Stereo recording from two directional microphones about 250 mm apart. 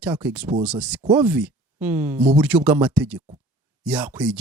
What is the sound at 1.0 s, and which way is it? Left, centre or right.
Speech, centre.